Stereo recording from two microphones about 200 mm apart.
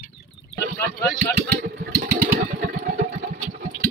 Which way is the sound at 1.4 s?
50° right (ahead or behind).